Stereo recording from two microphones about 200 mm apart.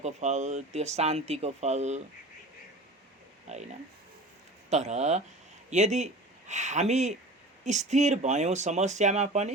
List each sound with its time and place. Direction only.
0.0 s speech: 35° right (ahead or behind)
3.4 s speech: 35° right (ahead or behind)
4.7 s speech: 35° right (ahead or behind)